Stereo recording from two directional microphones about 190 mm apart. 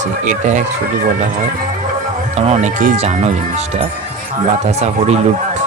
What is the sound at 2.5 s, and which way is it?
Speech, 40° right (ahead or behind).